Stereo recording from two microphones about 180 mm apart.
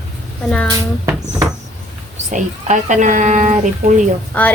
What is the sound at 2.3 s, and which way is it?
Speech, 45° right (ahead or behind).